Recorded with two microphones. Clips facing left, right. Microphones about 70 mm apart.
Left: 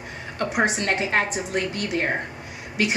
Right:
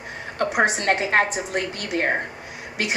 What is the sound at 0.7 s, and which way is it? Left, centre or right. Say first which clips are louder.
A woman's voice: right 3 dB; right.